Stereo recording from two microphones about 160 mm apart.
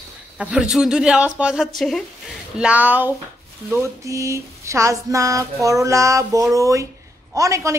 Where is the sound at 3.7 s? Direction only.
20° right (ahead or behind).